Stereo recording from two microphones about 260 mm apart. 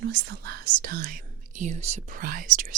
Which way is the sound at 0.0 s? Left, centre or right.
Right.